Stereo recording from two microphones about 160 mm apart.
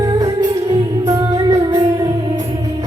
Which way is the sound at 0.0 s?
20° right (ahead or behind).